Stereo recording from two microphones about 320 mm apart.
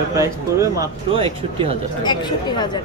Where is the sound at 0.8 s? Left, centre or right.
Centre.